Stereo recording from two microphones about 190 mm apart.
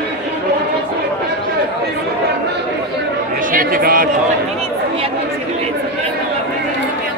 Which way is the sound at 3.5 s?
50° right (ahead or behind).